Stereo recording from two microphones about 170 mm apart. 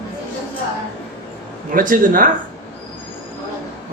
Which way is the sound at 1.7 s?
55° right (ahead or behind).